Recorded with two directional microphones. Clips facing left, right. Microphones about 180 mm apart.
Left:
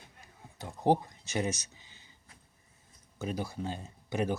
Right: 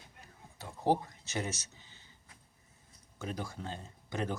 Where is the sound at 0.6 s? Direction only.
15° left (ahead or behind).